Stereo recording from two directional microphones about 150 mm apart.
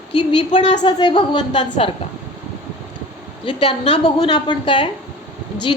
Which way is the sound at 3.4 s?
35° left (ahead or behind).